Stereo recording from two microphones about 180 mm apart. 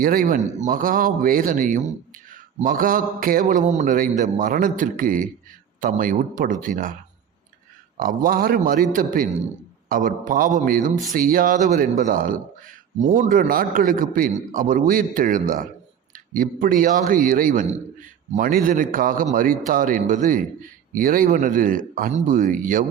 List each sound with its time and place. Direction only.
0.0 s a man's voice: 50° right (ahead or behind)
7.9 s a man's voice: 50° right (ahead or behind)